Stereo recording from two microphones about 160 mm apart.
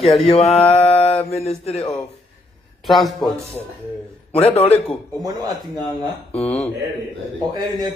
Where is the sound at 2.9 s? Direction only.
Centre (ahead or behind).